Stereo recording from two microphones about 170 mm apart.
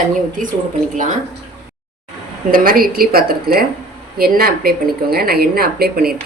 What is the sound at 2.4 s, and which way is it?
Speech, 60° right (ahead or behind).